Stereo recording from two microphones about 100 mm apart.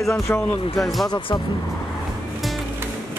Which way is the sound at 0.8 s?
Centre (ahead or behind).